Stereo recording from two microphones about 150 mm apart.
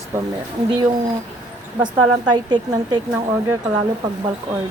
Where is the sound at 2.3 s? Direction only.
30° right (ahead or behind).